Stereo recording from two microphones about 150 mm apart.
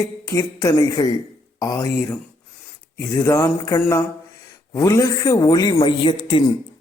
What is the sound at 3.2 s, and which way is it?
Mantra, 20° left (ahead or behind).